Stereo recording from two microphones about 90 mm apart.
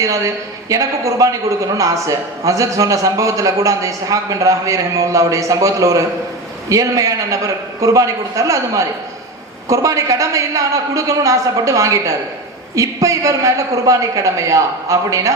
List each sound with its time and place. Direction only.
0.7 s a man's voice: 40° right (ahead or behind)